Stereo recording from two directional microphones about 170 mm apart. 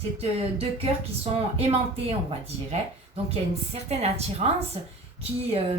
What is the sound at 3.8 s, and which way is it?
Speech, 40° right (ahead or behind).